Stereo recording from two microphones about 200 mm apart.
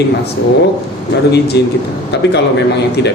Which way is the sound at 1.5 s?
55° left (ahead or behind).